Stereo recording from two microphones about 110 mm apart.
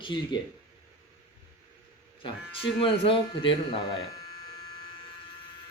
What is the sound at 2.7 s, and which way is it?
Speech, 55° left (ahead or behind).